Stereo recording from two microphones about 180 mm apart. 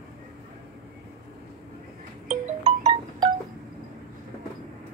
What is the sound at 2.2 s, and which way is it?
Music, 35° right (ahead or behind).